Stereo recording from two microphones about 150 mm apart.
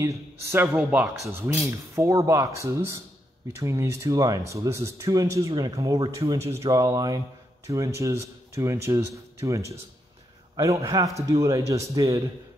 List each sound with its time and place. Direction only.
0.0 s a man's voice: 20° right (ahead or behind)